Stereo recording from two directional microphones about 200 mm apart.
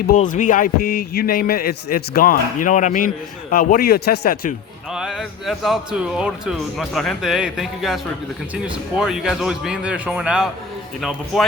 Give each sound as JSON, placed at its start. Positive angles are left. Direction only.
{"t": 0.1, "sound": "speech", "side_deg": 40}
{"t": 4.9, "sound": "speech", "side_deg": -5}